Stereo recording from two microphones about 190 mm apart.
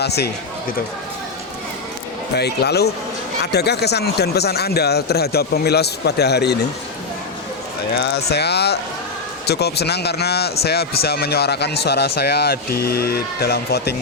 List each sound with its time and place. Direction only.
0.0 s speech: 60° left (ahead or behind)
2.3 s speech: 60° left (ahead or behind)
7.9 s speech: 60° left (ahead or behind)